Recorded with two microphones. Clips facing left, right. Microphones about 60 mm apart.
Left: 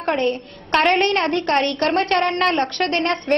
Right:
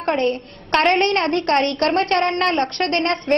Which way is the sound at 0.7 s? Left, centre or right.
Centre.